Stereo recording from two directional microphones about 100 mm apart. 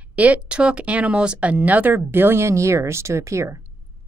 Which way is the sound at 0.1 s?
15° right (ahead or behind).